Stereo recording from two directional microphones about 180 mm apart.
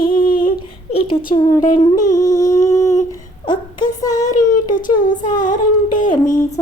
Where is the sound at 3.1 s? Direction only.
25° left (ahead or behind).